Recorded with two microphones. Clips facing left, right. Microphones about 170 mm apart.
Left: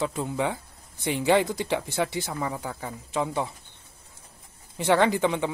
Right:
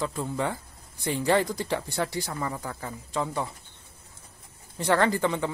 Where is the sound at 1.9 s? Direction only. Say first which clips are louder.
Left 2 dB; centre (ahead or behind).